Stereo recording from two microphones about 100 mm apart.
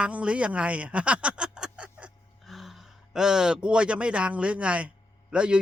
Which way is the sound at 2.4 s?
Centre (ahead or behind).